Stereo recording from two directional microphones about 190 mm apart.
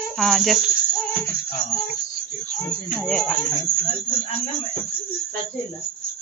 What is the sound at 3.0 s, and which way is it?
Speech, 5° left (ahead or behind).